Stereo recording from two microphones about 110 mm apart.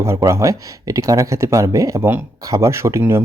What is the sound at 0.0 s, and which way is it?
Speech, 30° right (ahead or behind).